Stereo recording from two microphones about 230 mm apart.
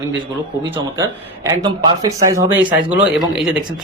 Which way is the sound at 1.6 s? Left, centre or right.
Centre.